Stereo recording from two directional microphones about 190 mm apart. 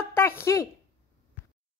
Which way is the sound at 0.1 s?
15° left (ahead or behind).